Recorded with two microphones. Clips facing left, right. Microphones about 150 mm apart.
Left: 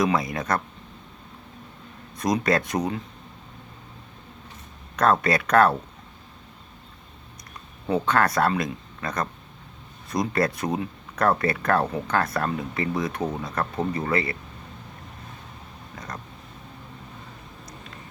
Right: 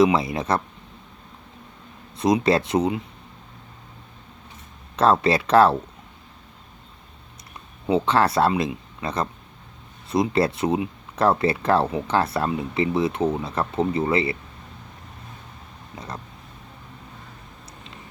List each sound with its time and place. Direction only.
0.0 s speech: 25° right (ahead or behind)
2.1 s speech: 25° right (ahead or behind)
4.9 s speech: 25° right (ahead or behind)
7.9 s speech: 25° right (ahead or behind)